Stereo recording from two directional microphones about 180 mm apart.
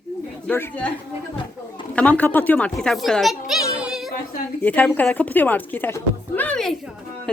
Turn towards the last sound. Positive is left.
turn(degrees=5)  # may be behind; listen again after turning